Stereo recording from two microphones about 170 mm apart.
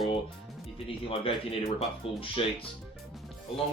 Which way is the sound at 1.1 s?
35° left (ahead or behind).